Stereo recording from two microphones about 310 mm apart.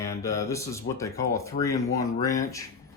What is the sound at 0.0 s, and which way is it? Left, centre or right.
Speech, centre.